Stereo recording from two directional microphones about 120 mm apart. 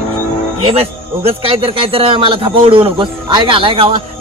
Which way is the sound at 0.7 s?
55° right (ahead or behind).